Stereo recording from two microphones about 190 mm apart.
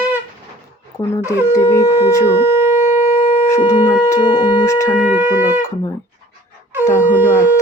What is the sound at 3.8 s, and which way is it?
Shofar, 20° left (ahead or behind).